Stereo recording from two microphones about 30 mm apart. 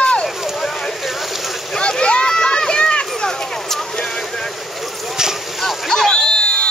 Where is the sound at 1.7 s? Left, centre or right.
Left.